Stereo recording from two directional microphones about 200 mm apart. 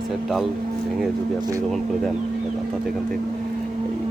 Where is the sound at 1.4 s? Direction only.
15° right (ahead or behind).